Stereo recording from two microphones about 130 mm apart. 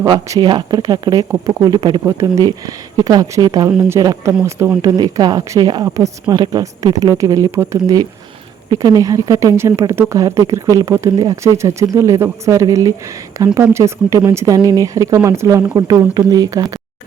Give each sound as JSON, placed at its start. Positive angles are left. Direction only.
{"t": 0.0, "sound": "speech", "side_deg": -30}
{"t": 1.3, "sound": "speech", "side_deg": -20}
{"t": 1.6, "sound": "speech", "side_deg": -35}